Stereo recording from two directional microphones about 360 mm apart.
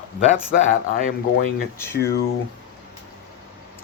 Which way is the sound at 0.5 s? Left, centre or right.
Left.